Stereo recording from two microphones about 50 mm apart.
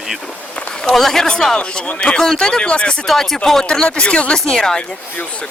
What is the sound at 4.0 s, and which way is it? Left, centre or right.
Speech, left.